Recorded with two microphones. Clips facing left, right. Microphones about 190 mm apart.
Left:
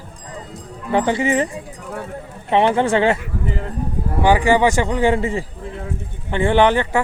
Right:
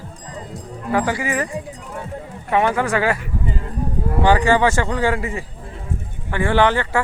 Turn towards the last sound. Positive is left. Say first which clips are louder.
# left 2 dB
turn(degrees=20)  # may be behind; listen again after turning